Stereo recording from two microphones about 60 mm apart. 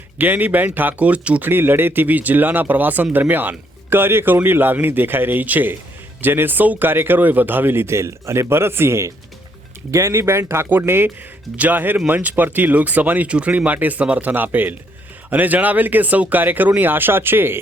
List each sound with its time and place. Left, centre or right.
0.2 s speech: right
1.5 s speech: right
11.5 s speech: right